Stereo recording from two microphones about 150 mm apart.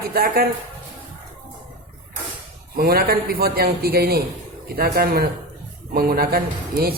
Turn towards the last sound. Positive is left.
turn(degrees=-90)